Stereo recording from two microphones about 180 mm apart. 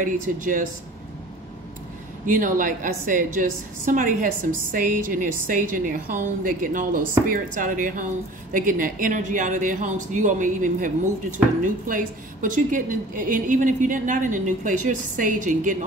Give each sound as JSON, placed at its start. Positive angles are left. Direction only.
{"t": 0.0, "sound": "a woman's voice", "side_deg": -45}
{"t": 2.2, "sound": "a woman's voice", "side_deg": -45}